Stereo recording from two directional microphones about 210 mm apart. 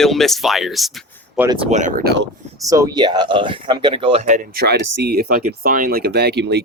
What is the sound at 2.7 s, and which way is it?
Speech, 20° right (ahead or behind).